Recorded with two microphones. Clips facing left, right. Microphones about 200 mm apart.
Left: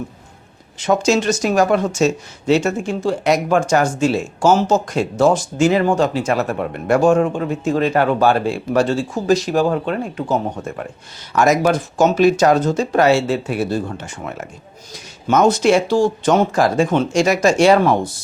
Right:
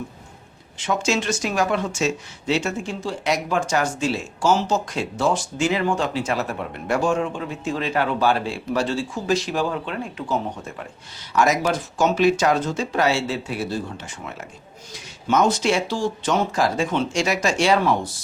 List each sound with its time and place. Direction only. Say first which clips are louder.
0.8 s speech: left 7 dB; 40° left (ahead or behind)